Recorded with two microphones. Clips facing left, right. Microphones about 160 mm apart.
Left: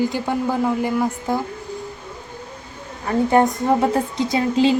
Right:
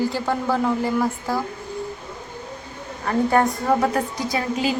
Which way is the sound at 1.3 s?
20° left (ahead or behind).